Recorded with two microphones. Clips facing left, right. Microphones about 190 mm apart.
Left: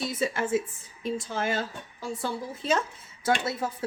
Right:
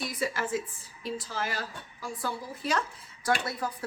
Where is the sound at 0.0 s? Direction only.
25° left (ahead or behind).